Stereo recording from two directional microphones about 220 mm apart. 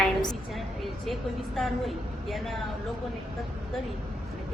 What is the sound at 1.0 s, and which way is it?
A woman's voice, centre (ahead or behind).